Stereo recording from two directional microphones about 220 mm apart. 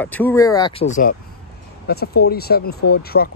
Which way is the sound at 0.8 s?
35° left (ahead or behind).